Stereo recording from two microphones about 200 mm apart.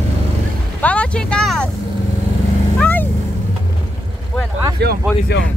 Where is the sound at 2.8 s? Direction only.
10° left (ahead or behind).